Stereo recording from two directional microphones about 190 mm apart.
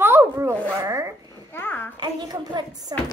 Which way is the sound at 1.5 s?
10° left (ahead or behind).